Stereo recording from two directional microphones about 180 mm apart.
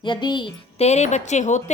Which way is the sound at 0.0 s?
25° left (ahead or behind).